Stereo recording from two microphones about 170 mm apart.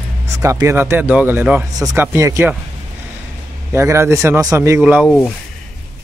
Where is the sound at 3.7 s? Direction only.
15° right (ahead or behind).